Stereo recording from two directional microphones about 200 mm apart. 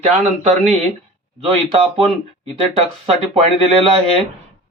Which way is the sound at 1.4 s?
30° right (ahead or behind).